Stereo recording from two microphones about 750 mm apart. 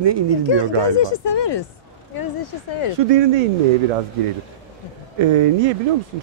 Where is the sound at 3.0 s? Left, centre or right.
Right.